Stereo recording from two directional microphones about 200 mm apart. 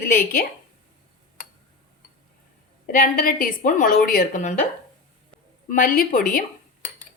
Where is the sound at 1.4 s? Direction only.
40° left (ahead or behind).